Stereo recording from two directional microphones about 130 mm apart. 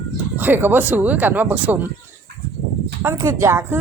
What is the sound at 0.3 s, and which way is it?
A woman's voice, 15° right (ahead or behind).